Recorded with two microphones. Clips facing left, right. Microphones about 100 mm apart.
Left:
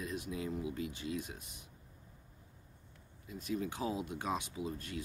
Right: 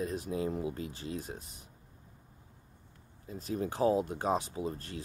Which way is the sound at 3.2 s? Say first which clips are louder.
Right 3 dB; 35° right (ahead or behind).